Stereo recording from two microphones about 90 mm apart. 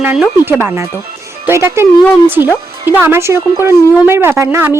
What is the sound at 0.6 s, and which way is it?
Speech, 30° right (ahead or behind).